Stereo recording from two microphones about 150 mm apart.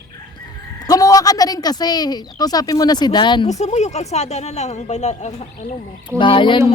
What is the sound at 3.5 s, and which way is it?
Speech, 50° left (ahead or behind).